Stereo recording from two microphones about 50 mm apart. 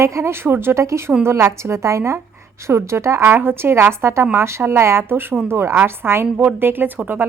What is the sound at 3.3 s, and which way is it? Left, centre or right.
A woman's voice, right.